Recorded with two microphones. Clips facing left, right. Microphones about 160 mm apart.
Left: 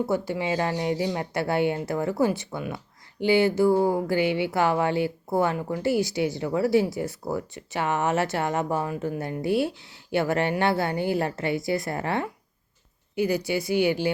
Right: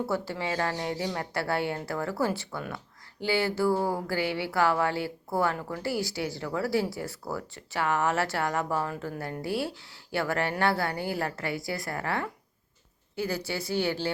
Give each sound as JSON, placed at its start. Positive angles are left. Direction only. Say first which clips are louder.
{"t": 0.0, "sound": "a woman's voice", "louder": "left 5 dB", "side_deg": 15}